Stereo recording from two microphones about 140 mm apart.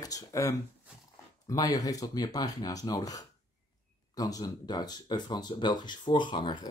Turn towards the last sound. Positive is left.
turn(degrees=35)  # may be behind; listen again after turning